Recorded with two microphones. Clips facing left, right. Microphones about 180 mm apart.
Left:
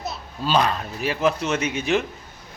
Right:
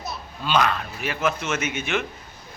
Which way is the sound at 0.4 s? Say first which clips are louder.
Left 1 dB; 35° left (ahead or behind).